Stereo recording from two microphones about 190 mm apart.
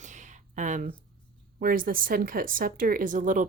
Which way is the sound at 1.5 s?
50° right (ahead or behind).